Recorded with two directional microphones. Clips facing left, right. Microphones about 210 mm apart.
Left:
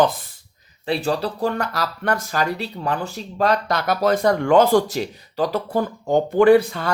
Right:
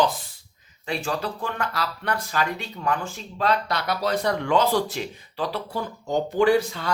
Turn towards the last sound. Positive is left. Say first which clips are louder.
# left 6 dB
turn(degrees=55)  # may be behind; listen again after turning